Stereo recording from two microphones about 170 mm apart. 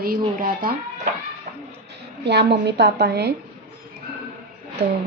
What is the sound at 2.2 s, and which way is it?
A woman's voice, 80° right.